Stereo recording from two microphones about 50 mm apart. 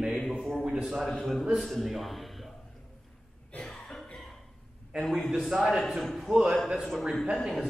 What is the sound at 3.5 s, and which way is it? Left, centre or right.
Cough, centre.